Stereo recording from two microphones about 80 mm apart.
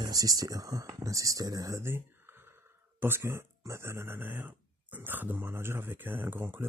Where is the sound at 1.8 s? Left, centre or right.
Right.